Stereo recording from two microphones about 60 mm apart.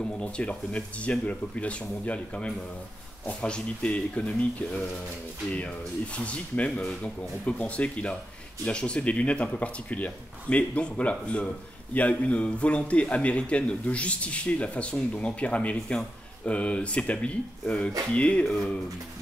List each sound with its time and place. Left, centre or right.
0.0 s a man's voice: centre
6.1 s a man's voice: left